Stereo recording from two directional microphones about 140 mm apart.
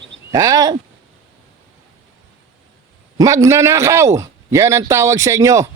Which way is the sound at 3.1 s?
25° right (ahead or behind).